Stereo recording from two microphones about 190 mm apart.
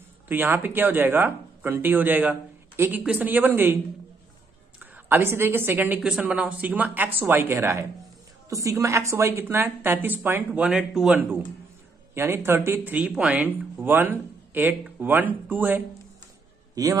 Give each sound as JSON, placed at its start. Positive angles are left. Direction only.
{"t": 0.3, "sound": "speech", "side_deg": -10}
{"t": 4.7, "sound": "a woman's voice", "side_deg": -10}